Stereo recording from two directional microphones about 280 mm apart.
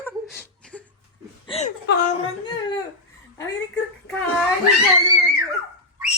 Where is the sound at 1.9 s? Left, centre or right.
Left.